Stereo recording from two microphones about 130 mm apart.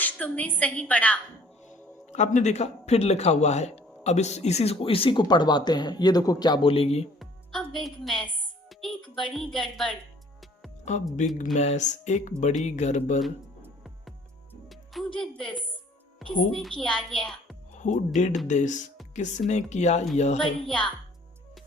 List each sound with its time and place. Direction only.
0.0 s a woman's voice: 10° left (ahead or behind)
1.6 s a man's voice: 65° left (ahead or behind); by 7.1 s 50° left (ahead or behind)
7.2 s a woman's voice: centre (ahead or behind)
10.8 s speech: 65° left (ahead or behind)
14.7 s music: centre (ahead or behind)
15.4 s a woman's voice: 5° left (ahead or behind)
17.7 s speech: 75° left (ahead or behind)